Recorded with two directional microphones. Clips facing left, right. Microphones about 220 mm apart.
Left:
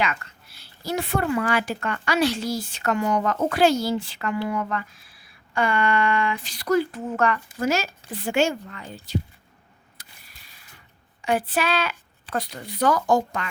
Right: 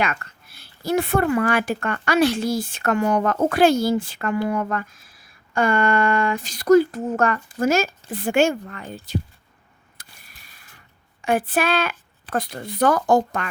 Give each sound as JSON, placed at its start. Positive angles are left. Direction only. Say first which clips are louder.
{"t": 0.0, "sound": "a woman's voice", "louder": "right 2 dB", "side_deg": -55}
{"t": 11.2, "sound": "a woman's voice", "louder": "right 3 dB", "side_deg": -50}